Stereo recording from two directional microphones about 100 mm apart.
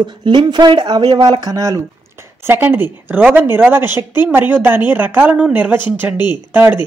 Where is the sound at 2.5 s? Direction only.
20° right (ahead or behind).